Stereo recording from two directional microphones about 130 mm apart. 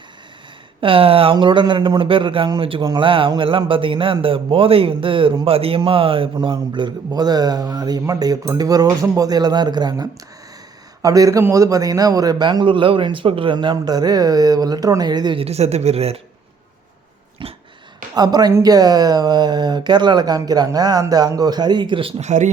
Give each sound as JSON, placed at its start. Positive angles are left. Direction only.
{"t": 0.8, "sound": "speech", "side_deg": -45}
{"t": 15.4, "sound": "speech", "side_deg": -55}
{"t": 17.4, "sound": "dog", "side_deg": -40}
{"t": 18.1, "sound": "speech", "side_deg": -30}
{"t": 22.2, "sound": "speech", "side_deg": -65}